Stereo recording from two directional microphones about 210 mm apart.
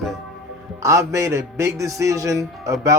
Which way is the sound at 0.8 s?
15° right (ahead or behind).